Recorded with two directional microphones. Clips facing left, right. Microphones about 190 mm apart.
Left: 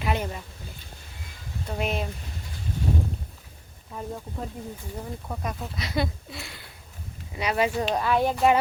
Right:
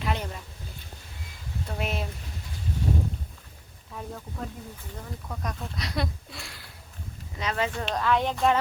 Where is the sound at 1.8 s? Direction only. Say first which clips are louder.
Left 4 dB; centre (ahead or behind).